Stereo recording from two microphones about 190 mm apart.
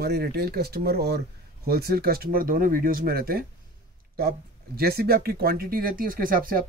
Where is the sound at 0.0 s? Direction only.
55° right (ahead or behind).